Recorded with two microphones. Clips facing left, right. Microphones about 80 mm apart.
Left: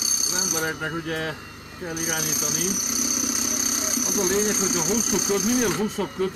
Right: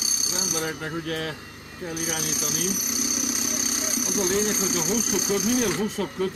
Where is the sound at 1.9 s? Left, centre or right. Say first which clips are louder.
Left 1 dB; left.